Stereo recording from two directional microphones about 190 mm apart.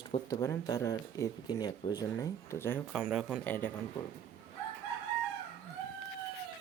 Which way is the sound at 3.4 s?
10° left (ahead or behind).